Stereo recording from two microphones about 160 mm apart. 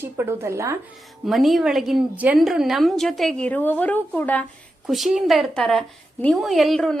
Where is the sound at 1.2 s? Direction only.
Centre (ahead or behind).